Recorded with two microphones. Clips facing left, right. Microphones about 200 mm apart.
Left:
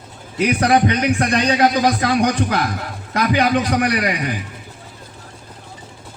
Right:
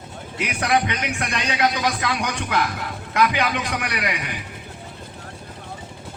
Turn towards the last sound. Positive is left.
turn(degrees=40)  # may be behind; listen again after turning